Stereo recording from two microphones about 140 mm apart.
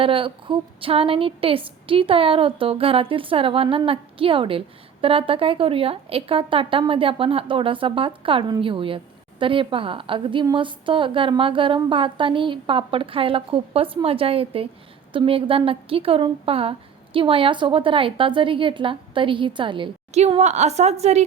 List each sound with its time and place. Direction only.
0.0 s a woman's voice: 40° right (ahead or behind)
20.1 s a woman's voice: 50° right (ahead or behind)